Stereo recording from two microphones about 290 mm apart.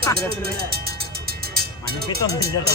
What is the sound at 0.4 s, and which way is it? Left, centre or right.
Music, right.